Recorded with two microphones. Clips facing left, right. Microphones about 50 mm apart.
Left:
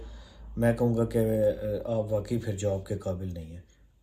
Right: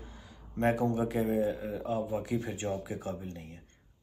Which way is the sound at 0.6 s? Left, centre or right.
Right.